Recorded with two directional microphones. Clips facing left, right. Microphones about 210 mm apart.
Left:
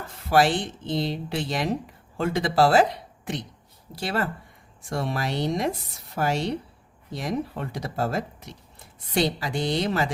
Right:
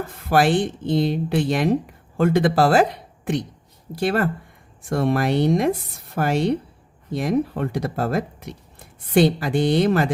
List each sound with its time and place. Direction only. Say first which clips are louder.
0.3 s speech: right 3 dB; 55° right (ahead or behind)
3.9 s speech: right 7 dB; 55° right (ahead or behind)